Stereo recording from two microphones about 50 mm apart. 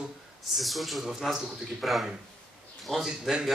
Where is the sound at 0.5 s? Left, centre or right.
Centre.